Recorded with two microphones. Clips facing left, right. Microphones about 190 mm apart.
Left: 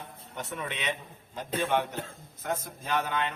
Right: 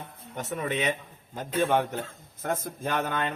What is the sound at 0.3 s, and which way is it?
Speech, 45° right (ahead or behind).